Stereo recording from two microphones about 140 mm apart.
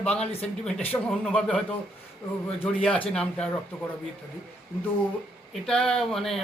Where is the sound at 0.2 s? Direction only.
45° left (ahead or behind).